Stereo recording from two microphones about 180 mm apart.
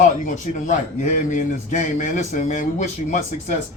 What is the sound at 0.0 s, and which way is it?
A man's voice, 45° left (ahead or behind).